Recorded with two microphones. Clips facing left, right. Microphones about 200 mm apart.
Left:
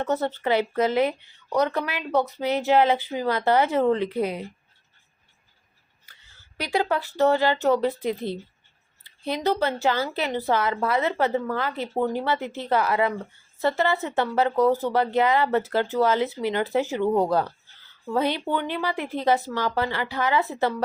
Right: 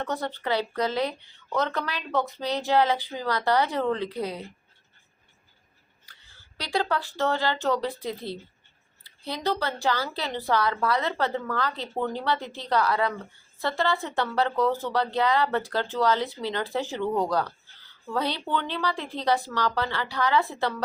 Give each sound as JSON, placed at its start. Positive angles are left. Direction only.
{"t": 0.0, "sound": "speech", "side_deg": 20}
{"t": 6.6, "sound": "speech", "side_deg": 15}